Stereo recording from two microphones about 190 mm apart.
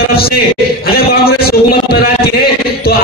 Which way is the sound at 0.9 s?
55° left (ahead or behind).